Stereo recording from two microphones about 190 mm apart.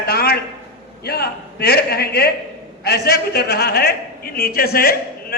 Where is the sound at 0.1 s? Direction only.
55° left (ahead or behind).